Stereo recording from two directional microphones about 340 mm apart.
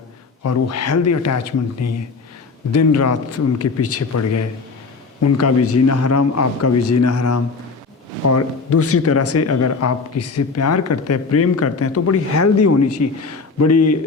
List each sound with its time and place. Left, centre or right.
0.4 s speech: left